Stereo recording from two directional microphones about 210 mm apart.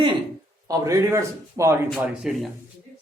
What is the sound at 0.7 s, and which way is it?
A man's voice, 15° right (ahead or behind).